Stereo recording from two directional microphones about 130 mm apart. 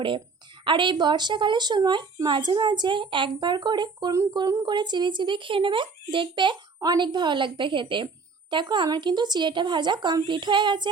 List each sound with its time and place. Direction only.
0.6 s a woman's voice: 40° right (ahead or behind)